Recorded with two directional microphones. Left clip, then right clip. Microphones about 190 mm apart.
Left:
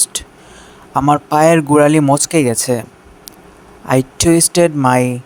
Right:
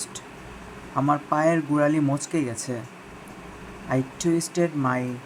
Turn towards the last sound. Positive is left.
turn(degrees=55)  # may be behind; listen again after turning